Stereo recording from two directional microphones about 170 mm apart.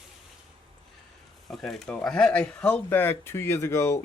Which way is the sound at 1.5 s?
Centre (ahead or behind).